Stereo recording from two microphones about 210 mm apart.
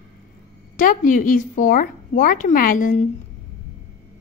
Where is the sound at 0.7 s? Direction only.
40° left (ahead or behind).